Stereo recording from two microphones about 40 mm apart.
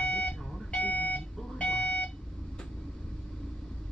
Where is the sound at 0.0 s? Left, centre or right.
Left.